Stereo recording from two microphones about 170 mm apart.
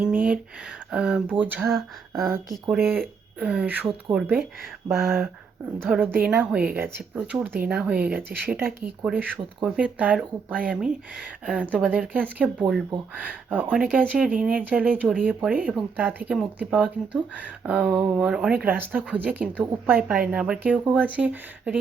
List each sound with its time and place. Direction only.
0.0 s a sound: 10° right (ahead or behind)
0.9 s speech: 5° right (ahead or behind)
2.8 s speech: 10° right (ahead or behind)
4.9 s speech: 15° right (ahead or behind)